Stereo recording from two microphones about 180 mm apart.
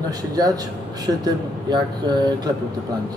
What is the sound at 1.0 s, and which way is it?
Speech, 25° right (ahead or behind).